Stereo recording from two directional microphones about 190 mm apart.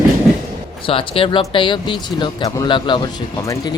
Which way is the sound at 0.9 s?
30° left (ahead or behind).